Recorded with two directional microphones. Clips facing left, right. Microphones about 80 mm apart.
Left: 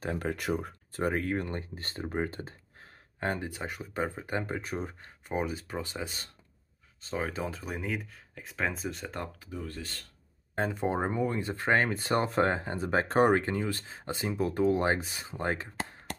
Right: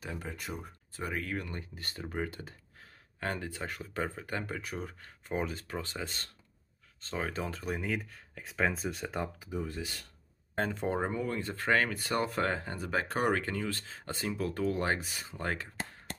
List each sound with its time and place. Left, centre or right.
0.2 s speech: left
0.9 s speech: left
5.3 s speech: centre
10.5 s speech: centre